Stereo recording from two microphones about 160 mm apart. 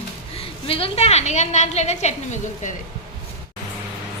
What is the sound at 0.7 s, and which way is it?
A woman's voice, 35° left (ahead or behind).